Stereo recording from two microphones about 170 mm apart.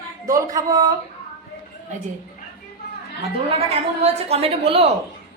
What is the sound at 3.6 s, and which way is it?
A woman's voice, 35° right (ahead or behind).